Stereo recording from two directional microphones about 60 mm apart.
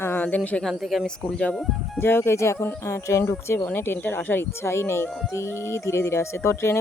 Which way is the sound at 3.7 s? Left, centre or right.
Left.